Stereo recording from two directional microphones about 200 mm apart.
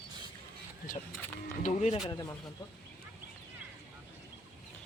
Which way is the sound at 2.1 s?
15° left (ahead or behind).